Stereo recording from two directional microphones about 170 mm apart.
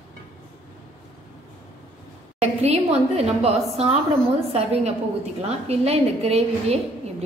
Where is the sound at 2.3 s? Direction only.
40° right (ahead or behind).